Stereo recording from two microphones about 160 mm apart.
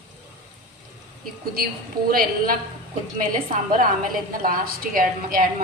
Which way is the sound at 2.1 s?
65° right (ahead or behind).